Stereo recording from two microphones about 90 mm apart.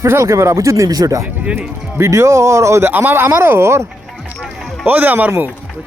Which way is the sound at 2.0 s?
35° right (ahead or behind).